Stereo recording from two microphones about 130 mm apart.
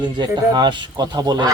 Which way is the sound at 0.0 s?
35° right (ahead or behind).